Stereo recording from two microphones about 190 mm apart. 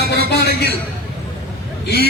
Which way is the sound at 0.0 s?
55° left (ahead or behind).